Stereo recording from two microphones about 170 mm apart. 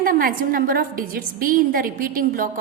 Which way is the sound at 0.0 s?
55° right (ahead or behind).